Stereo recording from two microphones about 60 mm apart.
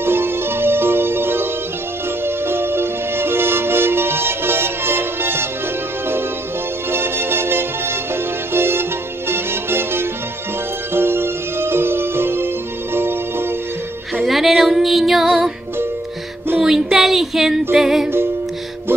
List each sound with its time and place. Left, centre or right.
0.0 s music: right
6.9 s music: right
14.2 s a sound: centre
15.2 s music: centre
16.5 s a sound: centre
17.7 s music: centre